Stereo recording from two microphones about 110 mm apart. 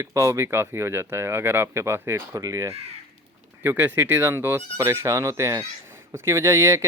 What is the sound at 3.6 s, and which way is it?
Speech, 20° right (ahead or behind).